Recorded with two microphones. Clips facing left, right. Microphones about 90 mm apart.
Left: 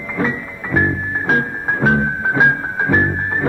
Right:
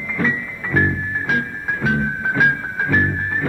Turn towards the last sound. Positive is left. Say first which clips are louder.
# left 3 dB
turn(degrees=25)  # may be behind; listen again after turning